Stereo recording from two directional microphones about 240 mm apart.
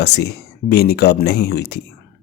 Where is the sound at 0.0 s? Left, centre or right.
Left.